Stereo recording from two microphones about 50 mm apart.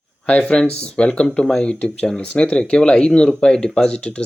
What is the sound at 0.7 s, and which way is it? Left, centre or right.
Speech, left.